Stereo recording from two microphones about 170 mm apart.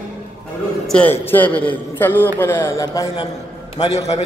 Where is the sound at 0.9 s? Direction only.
10° left (ahead or behind).